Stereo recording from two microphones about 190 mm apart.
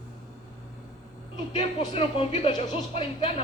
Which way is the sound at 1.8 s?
30° left (ahead or behind).